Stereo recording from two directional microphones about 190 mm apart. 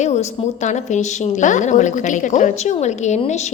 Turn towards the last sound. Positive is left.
turn(degrees=35)  # may be behind; listen again after turning